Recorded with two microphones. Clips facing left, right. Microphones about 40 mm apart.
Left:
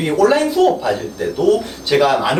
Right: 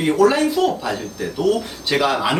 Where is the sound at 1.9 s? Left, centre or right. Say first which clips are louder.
Left 4 dB; centre.